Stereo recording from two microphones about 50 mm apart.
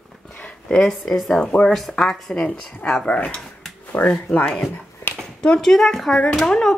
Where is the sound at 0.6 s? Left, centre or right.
Centre.